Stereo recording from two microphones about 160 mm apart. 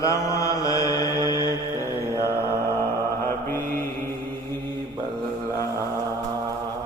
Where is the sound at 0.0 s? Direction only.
20° left (ahead or behind).